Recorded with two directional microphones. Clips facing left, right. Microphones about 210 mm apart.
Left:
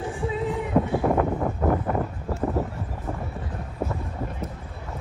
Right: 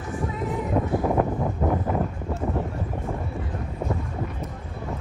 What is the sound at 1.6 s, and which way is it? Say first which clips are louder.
Vehicle: left 1 dB; 5° right (ahead or behind).